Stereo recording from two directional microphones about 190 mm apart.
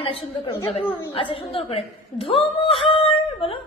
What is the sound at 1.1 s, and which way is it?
A woman's voice, 25° left (ahead or behind).